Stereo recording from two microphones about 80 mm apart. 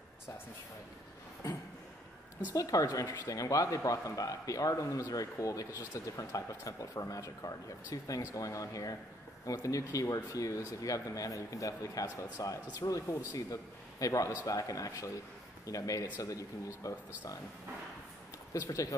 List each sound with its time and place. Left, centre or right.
2.5 s a man's voice: left
18.7 s speech: left